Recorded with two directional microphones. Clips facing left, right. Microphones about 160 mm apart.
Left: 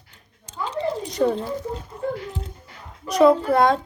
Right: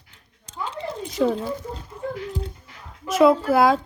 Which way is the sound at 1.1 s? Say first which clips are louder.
Even; centre (ahead or behind).